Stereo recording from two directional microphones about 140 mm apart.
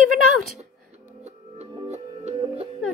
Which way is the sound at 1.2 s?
55° right (ahead or behind).